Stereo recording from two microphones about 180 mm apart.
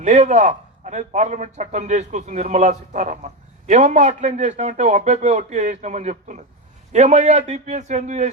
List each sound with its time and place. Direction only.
0.0 s a man's voice: 40° right (ahead or behind)